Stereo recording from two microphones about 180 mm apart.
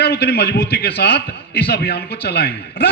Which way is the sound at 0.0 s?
65° left (ahead or behind).